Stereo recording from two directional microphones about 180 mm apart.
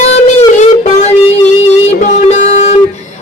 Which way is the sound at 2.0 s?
40° left (ahead or behind).